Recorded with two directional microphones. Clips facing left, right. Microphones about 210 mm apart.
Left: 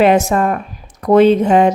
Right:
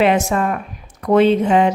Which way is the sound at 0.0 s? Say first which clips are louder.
Left 4 dB; 40° left (ahead or behind).